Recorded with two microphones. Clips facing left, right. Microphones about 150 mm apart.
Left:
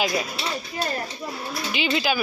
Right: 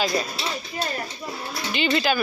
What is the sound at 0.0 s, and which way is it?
Speech, 10° left (ahead or behind).